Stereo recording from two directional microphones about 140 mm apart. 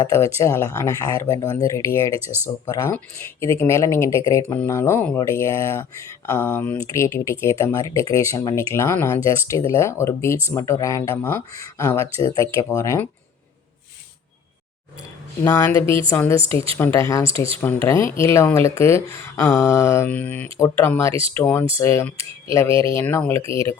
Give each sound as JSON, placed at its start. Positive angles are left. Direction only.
{"t": 0.0, "sound": "speech", "side_deg": 20}
{"t": 2.2, "sound": "speech", "side_deg": -15}
{"t": 3.4, "sound": "speech", "side_deg": 20}
{"t": 15.4, "sound": "speech", "side_deg": 15}
{"t": 17.2, "sound": "speech", "side_deg": -40}
{"t": 17.6, "sound": "speech", "side_deg": 15}